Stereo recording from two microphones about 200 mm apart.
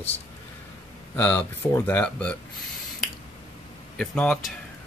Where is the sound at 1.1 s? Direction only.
10° left (ahead or behind).